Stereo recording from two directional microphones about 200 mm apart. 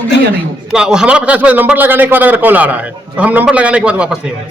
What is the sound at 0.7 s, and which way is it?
A man's voice, 5° right (ahead or behind).